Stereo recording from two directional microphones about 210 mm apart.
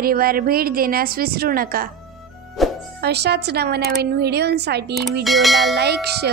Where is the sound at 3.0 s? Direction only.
50° right (ahead or behind).